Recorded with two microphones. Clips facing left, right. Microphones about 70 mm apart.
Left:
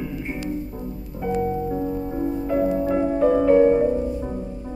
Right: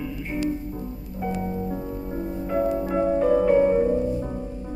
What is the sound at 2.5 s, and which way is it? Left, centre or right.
Music, centre.